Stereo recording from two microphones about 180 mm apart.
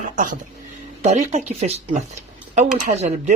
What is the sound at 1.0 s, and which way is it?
Speech, 40° right (ahead or behind).